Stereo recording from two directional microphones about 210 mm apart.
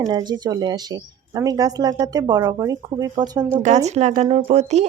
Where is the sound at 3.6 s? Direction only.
35° right (ahead or behind).